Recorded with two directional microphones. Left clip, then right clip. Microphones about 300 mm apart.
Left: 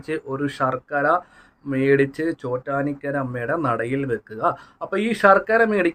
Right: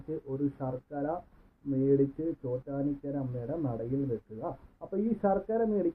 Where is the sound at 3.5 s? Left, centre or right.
Left.